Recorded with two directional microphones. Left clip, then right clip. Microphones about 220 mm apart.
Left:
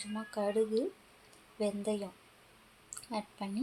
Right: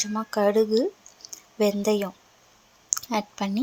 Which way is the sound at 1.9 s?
35° right (ahead or behind).